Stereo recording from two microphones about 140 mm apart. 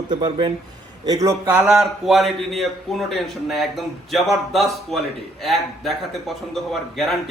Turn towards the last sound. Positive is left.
turn(degrees=0)  # may be behind; listen again after turning